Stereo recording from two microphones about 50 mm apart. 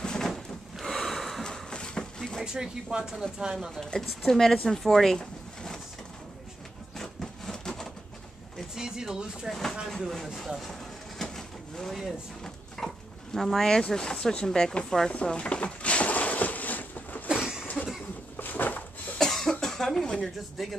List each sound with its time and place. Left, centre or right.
0.0 s a sound: centre
0.3 s a sound: centre
2.4 s speech: centre
4.0 s speech: centre
7.0 s wood: centre
8.7 s speech: centre
9.5 s speech: centre
10.2 s speech: centre
10.7 s vehicle: centre
12.7 s speech: centre
15.0 s drawer open or close: centre
17.3 s a sound: centre
18.3 s a sound: left
19.1 s cough: centre